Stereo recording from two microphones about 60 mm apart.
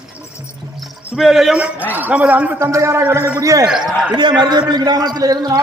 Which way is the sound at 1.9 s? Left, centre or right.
Right.